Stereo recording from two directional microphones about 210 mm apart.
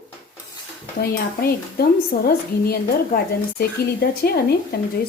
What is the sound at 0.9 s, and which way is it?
Speech, 45° left (ahead or behind).